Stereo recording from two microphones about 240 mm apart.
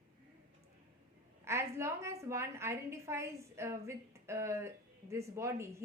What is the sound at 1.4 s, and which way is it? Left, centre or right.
A woman's voice, centre.